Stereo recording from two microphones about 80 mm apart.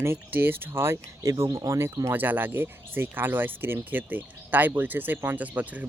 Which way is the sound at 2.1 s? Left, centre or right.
Right.